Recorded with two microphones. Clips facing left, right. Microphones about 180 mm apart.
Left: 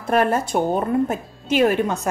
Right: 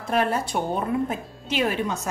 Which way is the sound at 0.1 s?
50° left (ahead or behind).